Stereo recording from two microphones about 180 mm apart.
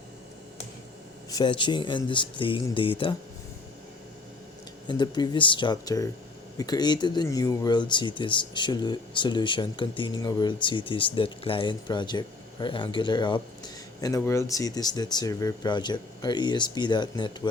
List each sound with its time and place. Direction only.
1.3 s speech: 25° left (ahead or behind)
4.9 s speech: 25° left (ahead or behind)